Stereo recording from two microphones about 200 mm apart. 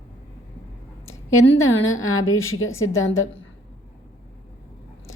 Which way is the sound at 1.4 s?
75° left (ahead or behind).